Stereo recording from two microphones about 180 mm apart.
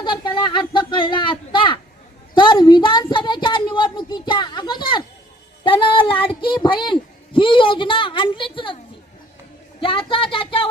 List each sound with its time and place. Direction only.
0.0 s a sound: 25° left (ahead or behind)
5.6 s speech: 30° left (ahead or behind)
9.8 s a woman's voice: 30° left (ahead or behind)